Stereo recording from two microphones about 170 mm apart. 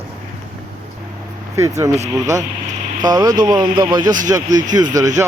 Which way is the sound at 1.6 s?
20° right (ahead or behind).